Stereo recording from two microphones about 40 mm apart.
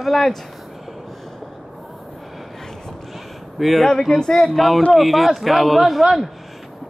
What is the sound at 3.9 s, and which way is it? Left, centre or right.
Speech, centre.